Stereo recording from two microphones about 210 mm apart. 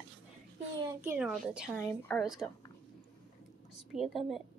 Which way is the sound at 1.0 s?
10° right (ahead or behind).